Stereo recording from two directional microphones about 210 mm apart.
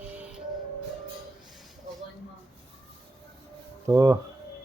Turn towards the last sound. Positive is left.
turn(degrees=-15)  # may be behind; listen again after turning